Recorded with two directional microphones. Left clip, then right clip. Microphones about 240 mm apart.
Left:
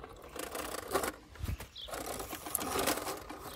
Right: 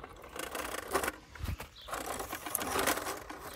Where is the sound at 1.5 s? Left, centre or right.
Centre.